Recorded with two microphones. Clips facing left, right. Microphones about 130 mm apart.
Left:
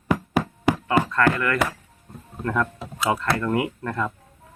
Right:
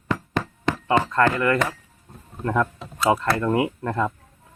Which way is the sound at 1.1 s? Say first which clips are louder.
Right 2 dB; 25° right (ahead or behind).